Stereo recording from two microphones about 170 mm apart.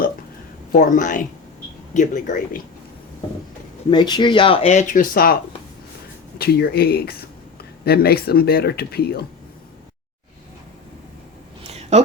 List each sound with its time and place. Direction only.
0.7 s speech: 50° left (ahead or behind)
3.8 s speech: 25° left (ahead or behind); by 5.4 s 60° left (ahead or behind)
6.4 s speech: 65° left (ahead or behind)
11.6 s a sound: 40° right (ahead or behind)